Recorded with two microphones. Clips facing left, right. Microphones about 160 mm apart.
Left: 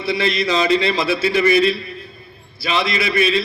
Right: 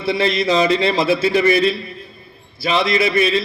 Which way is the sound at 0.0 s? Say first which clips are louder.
Right 2 dB; 40° right (ahead or behind).